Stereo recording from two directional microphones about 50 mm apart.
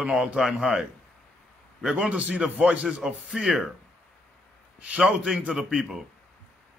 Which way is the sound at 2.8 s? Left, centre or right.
Centre.